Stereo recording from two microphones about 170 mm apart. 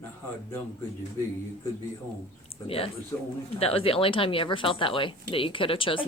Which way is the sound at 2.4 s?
35° left (ahead or behind).